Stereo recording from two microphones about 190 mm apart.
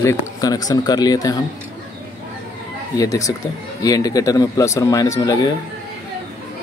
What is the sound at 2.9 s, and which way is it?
Speech, 15° left (ahead or behind).